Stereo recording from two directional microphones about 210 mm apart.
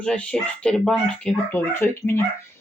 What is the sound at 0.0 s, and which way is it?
Speech, 5° left (ahead or behind).